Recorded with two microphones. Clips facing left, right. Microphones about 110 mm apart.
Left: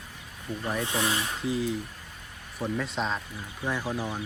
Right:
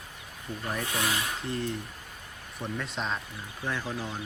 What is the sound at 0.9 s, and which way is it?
Speech, 25° left (ahead or behind).